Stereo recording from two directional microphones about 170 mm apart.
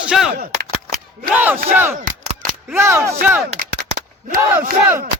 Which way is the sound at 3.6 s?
65° right (ahead or behind).